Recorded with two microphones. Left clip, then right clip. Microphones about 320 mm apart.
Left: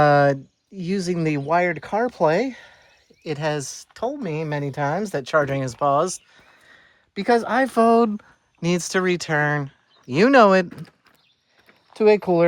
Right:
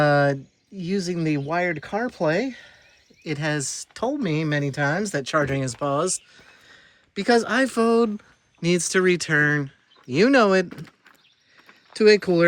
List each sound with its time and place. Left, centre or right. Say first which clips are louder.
0.0 s a sound: left 3 dB; centre
0.8 s speech: left 2 dB; centre
11.9 s speech: even; centre